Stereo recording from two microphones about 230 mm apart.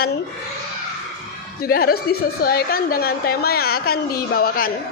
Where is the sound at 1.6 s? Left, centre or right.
Left.